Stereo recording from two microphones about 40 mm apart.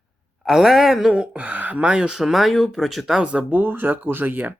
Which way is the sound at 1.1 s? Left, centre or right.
Right.